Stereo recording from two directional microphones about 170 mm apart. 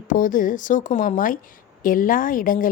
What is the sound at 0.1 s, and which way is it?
A woman's voice, 50° left (ahead or behind).